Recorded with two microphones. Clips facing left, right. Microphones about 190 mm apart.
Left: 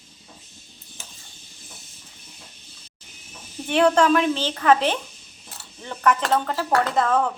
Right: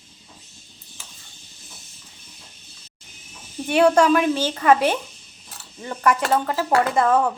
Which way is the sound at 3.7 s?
10° right (ahead or behind).